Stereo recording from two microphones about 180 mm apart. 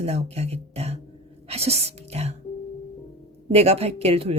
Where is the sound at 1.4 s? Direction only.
35° right (ahead or behind).